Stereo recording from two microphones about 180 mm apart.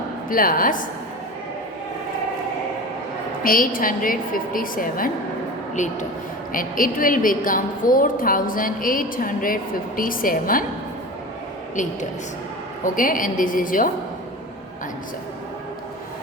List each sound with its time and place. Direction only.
0.3 s a woman's voice: 50° left (ahead or behind)
3.4 s a woman's voice: 50° left (ahead or behind)
12.8 s a woman's voice: 50° left (ahead or behind)